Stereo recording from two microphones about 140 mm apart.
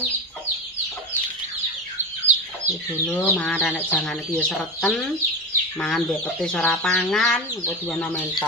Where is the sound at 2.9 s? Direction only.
15° left (ahead or behind).